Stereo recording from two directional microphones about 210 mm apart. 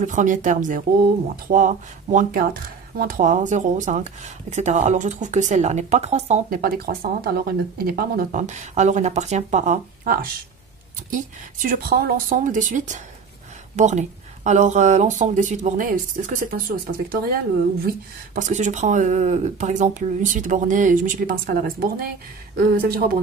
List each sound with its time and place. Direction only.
0.0 s speech: 35° right (ahead or behind)